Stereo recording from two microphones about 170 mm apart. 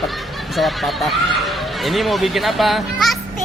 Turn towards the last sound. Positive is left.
turn(degrees=0)  # may be behind; listen again after turning